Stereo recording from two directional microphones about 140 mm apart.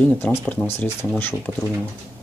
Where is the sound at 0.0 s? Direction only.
15° left (ahead or behind).